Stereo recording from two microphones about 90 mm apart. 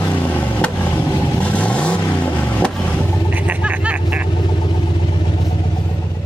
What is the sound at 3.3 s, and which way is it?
Vehicle, 15° right (ahead or behind).